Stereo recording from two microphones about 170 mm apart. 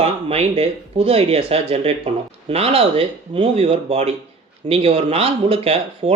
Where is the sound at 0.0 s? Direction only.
40° right (ahead or behind).